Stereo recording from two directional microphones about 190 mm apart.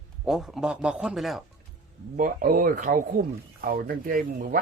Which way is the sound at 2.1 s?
45° right (ahead or behind).